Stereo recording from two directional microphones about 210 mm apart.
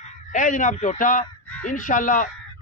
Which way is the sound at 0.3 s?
35° left (ahead or behind).